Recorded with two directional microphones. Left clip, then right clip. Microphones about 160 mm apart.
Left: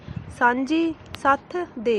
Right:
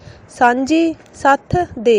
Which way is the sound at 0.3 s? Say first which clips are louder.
Right 7 dB; 30° right (ahead or behind).